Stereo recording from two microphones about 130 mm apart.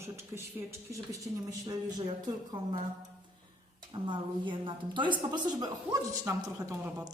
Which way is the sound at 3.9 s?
35° right (ahead or behind).